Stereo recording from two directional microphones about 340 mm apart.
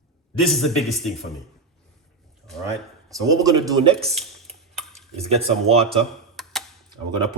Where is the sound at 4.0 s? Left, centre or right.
Centre.